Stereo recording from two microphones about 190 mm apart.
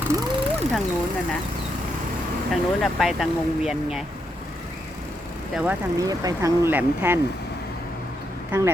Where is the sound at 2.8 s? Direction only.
Centre (ahead or behind).